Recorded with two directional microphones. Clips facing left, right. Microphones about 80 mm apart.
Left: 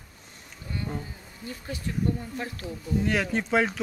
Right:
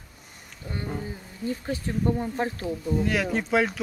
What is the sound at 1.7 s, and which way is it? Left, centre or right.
Speech, right.